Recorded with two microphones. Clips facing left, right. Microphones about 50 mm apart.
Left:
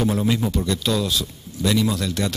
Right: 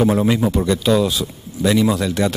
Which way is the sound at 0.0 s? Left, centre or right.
Right.